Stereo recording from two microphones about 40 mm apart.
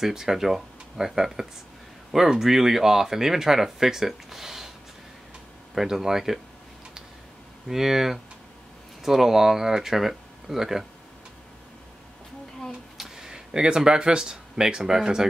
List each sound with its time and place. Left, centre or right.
0.0 s speech: centre
5.8 s speech: centre
7.6 s speech: centre
12.9 s speech: centre